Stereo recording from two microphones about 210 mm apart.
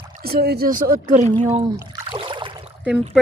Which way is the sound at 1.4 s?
30° right (ahead or behind).